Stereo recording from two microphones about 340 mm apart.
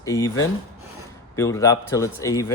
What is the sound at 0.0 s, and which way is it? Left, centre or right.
Speech, centre.